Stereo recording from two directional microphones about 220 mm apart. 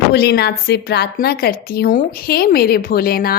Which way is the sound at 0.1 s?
50° left (ahead or behind).